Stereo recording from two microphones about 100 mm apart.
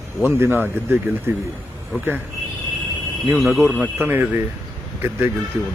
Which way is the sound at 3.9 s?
20° right (ahead or behind).